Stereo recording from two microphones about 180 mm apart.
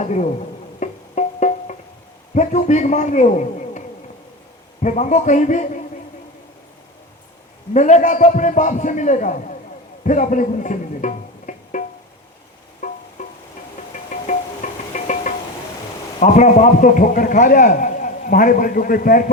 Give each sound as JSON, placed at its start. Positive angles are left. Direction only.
{"t": 0.0, "sound": "speech", "side_deg": 40}
{"t": 0.8, "sound": "music", "side_deg": 40}
{"t": 2.3, "sound": "a man's voice", "side_deg": 40}
{"t": 7.7, "sound": "a man's voice", "side_deg": 40}
{"t": 12.8, "sound": "music", "side_deg": 50}
{"t": 16.2, "sound": "a man's voice", "side_deg": 40}